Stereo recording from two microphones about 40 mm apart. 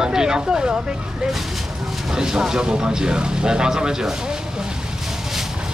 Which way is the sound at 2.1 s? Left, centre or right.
Centre.